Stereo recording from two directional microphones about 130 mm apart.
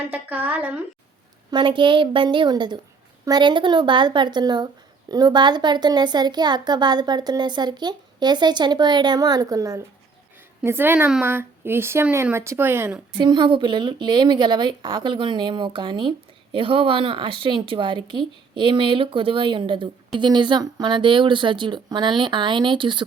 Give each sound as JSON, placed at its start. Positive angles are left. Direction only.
{"t": 0.1, "sound": "speech", "side_deg": -10}
{"t": 1.5, "sound": "a woman's voice", "side_deg": -40}
{"t": 13.1, "sound": "a woman's voice", "side_deg": -35}